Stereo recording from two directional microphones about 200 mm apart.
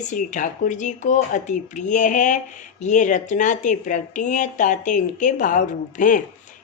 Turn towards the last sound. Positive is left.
turn(degrees=40)  # may be behind; listen again after turning